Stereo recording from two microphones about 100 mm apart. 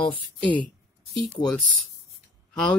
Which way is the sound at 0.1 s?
15° left (ahead or behind).